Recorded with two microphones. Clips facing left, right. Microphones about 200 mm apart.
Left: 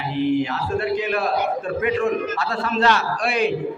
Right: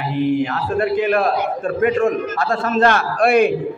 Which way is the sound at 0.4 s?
50° right (ahead or behind).